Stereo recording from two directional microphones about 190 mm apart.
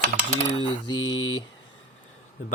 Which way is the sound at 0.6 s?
25° left (ahead or behind).